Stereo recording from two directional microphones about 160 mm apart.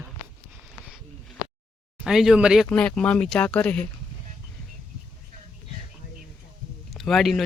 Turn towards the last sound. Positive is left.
turn(degrees=0)  # may be behind; listen again after turning